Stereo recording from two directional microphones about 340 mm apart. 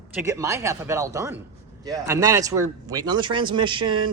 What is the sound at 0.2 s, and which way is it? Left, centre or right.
Speech, centre.